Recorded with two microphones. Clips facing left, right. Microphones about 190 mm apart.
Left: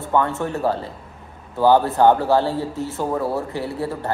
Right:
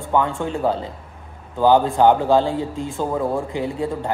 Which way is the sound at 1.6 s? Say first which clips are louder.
Even; 15° right (ahead or behind).